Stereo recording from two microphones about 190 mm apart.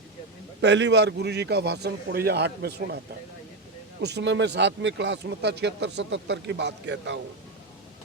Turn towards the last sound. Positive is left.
turn(degrees=-70)  # may be behind; listen again after turning